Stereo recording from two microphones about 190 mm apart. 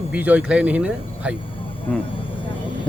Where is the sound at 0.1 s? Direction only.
5° right (ahead or behind).